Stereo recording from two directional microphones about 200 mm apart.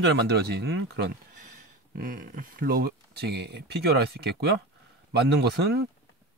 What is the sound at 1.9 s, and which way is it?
Speech, 40° right (ahead or behind).